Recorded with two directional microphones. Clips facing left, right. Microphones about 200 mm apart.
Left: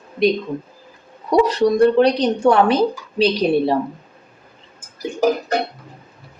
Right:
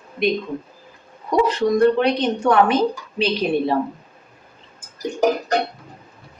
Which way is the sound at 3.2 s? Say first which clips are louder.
Left 4 dB; 35° left (ahead or behind).